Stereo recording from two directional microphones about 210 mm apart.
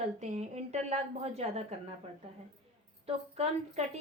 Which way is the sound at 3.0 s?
30° right (ahead or behind).